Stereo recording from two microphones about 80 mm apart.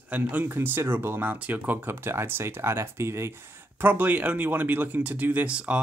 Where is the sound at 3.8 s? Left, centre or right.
Right.